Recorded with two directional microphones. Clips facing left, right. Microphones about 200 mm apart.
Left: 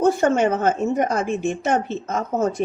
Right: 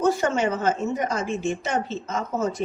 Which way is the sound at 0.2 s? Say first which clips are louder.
Left 5 dB; 50° left (ahead or behind).